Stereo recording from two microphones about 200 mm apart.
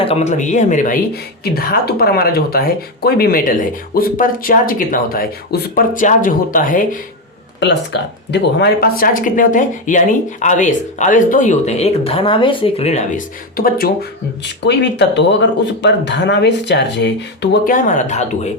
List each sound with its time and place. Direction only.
0.0 s speech: 30° left (ahead or behind)
7.9 s speech: 60° left (ahead or behind)
17.7 s speech: 40° left (ahead or behind)